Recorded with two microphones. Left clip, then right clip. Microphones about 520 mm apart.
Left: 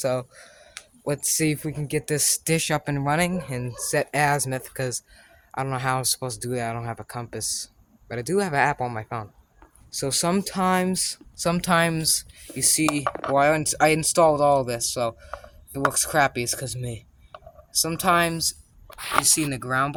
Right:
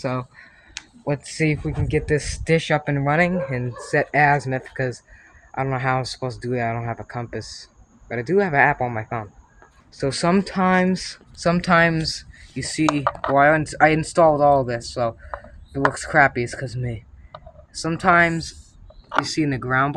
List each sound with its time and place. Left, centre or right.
0.0 s speech: left